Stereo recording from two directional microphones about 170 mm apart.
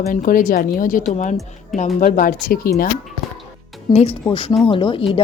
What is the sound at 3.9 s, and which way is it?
Speech, 40° left (ahead or behind).